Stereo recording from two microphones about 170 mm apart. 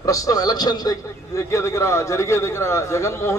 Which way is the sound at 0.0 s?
20° left (ahead or behind).